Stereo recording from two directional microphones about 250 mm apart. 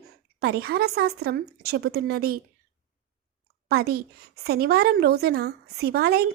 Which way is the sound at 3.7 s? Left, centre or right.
Right.